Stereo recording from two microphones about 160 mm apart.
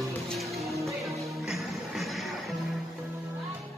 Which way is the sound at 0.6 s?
20° right (ahead or behind).